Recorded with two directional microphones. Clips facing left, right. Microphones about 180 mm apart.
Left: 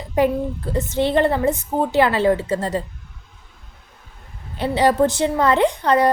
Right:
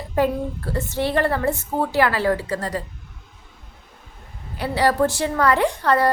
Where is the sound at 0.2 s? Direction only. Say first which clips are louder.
Left 2 dB; 20° left (ahead or behind).